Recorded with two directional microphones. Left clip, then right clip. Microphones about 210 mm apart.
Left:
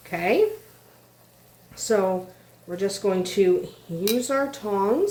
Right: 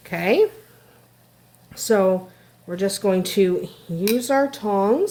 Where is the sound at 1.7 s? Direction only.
50° right (ahead or behind).